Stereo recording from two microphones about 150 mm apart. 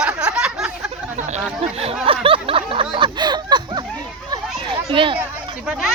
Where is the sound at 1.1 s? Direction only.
50° right (ahead or behind).